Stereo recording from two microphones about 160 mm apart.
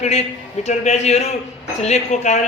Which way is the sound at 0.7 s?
45° left (ahead or behind).